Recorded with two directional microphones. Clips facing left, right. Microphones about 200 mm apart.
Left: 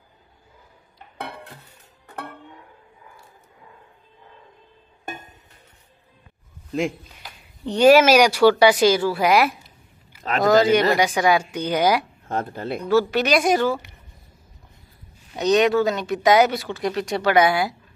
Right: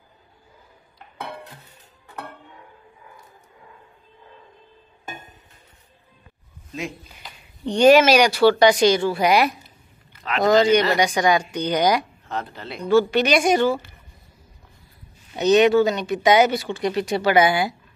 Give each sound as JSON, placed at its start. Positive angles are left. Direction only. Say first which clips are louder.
{"t": 7.1, "sound": "speech", "louder": "even", "side_deg": 5}
{"t": 12.3, "sound": "speech", "louder": "left 7 dB", "side_deg": 50}
{"t": 12.8, "sound": "speech", "louder": "right 2 dB", "side_deg": 5}
{"t": 15.3, "sound": "speech", "louder": "right 2 dB", "side_deg": -5}